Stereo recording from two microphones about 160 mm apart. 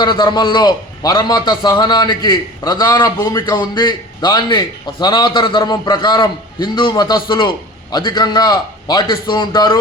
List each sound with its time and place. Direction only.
0.0 s a man's voice: 30° left (ahead or behind)